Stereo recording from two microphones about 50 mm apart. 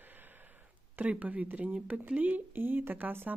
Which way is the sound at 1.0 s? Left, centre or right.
Right.